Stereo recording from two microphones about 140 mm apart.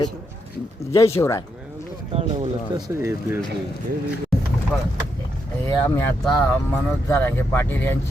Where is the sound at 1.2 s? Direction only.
25° left (ahead or behind).